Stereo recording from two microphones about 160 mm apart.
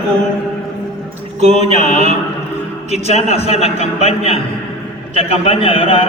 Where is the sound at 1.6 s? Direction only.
45° left (ahead or behind).